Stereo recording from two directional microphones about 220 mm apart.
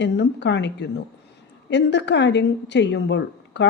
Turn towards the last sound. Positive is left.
turn(degrees=50)  # may be behind; listen again after turning